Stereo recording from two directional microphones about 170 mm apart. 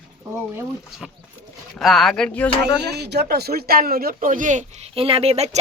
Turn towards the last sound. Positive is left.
turn(degrees=-40)  # may be behind; listen again after turning